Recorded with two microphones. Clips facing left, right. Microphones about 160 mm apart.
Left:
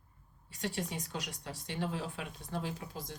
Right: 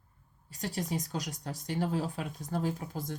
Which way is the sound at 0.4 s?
40° right (ahead or behind).